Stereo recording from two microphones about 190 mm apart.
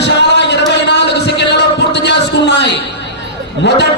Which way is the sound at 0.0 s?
65° left (ahead or behind).